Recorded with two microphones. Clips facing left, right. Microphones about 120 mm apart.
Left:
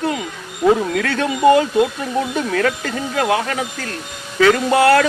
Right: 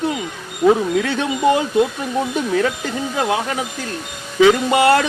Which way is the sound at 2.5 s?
15° right (ahead or behind).